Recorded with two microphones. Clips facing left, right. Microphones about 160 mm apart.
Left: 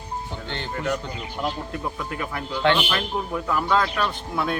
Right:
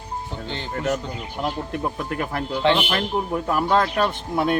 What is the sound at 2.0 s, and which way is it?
Speech, 45° right (ahead or behind).